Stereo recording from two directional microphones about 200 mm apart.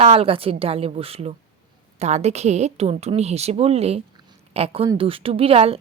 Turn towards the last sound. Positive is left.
turn(degrees=-30)  # may be behind; listen again after turning